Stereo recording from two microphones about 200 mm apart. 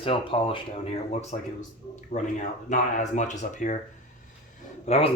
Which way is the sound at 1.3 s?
40° left (ahead or behind).